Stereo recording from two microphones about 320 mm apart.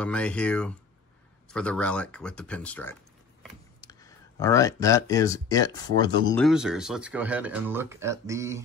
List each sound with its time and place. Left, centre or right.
0.0 s speech: centre
6.3 s speech: centre